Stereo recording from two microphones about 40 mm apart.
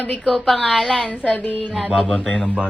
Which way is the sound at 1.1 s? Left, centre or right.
Left.